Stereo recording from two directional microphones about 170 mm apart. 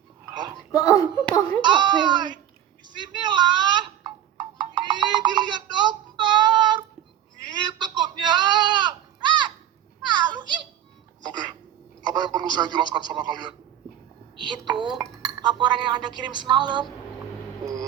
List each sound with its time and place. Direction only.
0.7 s speech: 20° left (ahead or behind)
1.6 s speech: 25° right (ahead or behind)
2.8 s a sound: 25° right (ahead or behind)
8.2 s sheep: 25° right (ahead or behind)
10.0 s children playing: 25° right (ahead or behind)
11.2 s music: 25° right (ahead or behind)
12.0 s speech: 25° right (ahead or behind)